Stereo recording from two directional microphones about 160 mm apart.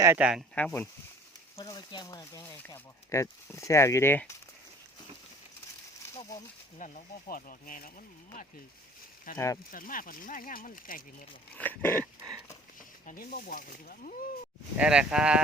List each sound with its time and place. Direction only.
0.0 s speech: 15° right (ahead or behind)
0.5 s speech: 10° left (ahead or behind)
1.6 s speech: 25° left (ahead or behind)
6.7 s speech: 55° left (ahead or behind)
9.3 s speech: 60° left (ahead or behind)
11.5 s speech: 10° left (ahead or behind)
13.1 s speech: 65° left (ahead or behind)
14.8 s speech: 5° right (ahead or behind)